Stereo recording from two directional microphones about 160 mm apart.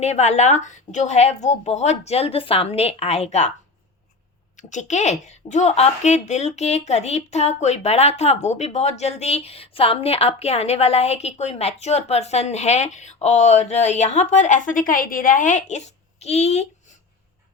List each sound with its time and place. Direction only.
0.0 s a woman's voice: 45° left (ahead or behind)
4.5 s a woman's voice: 50° left (ahead or behind)